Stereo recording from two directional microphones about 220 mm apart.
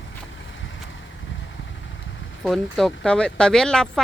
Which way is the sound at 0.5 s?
60° left (ahead or behind).